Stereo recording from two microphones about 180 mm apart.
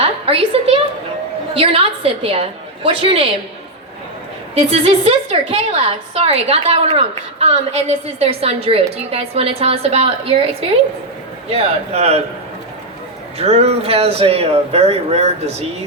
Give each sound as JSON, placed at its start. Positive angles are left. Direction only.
{"t": 0.0, "sound": "a woman's voice", "side_deg": -35}
{"t": 4.5, "sound": "a woman's voice", "side_deg": -30}
{"t": 13.4, "sound": "a woman's voice", "side_deg": -35}